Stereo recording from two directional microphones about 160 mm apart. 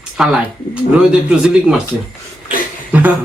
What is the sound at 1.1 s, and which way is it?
Speech, 5° right (ahead or behind).